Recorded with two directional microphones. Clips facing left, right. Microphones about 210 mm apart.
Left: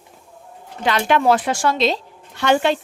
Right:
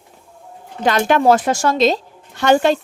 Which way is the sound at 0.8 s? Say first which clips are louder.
Right 3 dB; 45° right (ahead or behind).